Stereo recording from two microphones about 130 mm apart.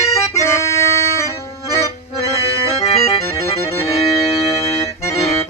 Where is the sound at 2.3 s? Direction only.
50° left (ahead or behind).